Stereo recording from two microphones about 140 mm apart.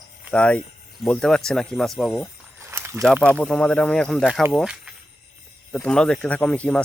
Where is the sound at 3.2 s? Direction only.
10° left (ahead or behind).